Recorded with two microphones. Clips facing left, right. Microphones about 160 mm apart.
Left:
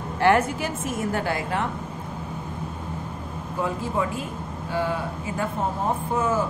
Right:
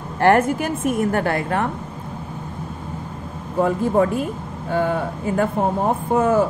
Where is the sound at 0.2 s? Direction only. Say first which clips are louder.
Right 4 dB; 50° right (ahead or behind).